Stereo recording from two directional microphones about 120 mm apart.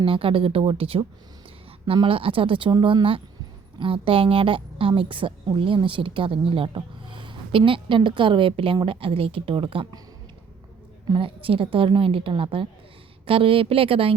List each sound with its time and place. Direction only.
0.0 s a woman's voice: 50° right (ahead or behind)
11.1 s a woman's voice: 45° right (ahead or behind)